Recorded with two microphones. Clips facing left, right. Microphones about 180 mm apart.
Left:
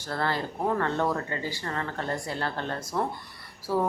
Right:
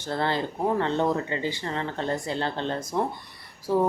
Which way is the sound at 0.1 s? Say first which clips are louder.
Right 3 dB; 25° right (ahead or behind).